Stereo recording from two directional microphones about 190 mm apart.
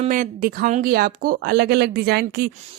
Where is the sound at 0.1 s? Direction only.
45° right (ahead or behind).